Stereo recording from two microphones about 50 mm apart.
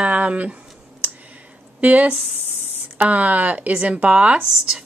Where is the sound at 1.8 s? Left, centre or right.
Right.